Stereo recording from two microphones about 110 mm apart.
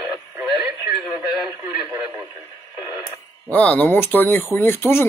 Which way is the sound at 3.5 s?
15° left (ahead or behind).